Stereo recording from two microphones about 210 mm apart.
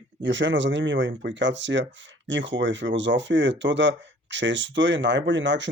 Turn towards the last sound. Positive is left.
turn(degrees=-60)  # may be behind; listen again after turning